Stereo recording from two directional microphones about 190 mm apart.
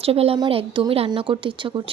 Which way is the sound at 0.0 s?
30° right (ahead or behind).